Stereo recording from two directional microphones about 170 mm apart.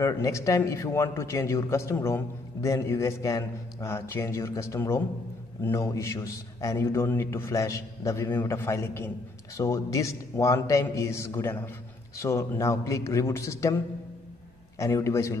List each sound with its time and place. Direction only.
0.0 s a man's voice: 20° left (ahead or behind)
14.8 s a man's voice: 15° left (ahead or behind)